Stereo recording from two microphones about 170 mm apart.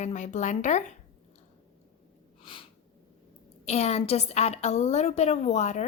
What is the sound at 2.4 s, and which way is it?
Snort, 30° left (ahead or behind).